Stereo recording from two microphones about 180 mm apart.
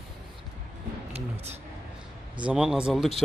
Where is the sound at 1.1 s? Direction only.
35° right (ahead or behind).